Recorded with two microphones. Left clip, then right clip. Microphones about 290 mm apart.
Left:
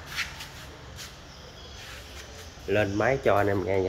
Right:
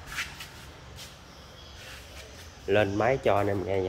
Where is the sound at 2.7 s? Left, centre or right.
Centre.